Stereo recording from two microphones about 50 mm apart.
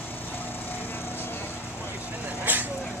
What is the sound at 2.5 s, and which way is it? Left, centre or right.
Vehicle, right.